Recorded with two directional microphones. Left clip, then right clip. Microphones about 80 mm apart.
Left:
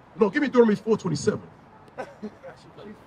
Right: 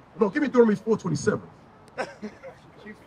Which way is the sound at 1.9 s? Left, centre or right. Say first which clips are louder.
Right 4 dB; right.